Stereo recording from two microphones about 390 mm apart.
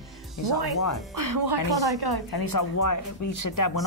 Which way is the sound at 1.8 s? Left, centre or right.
Right.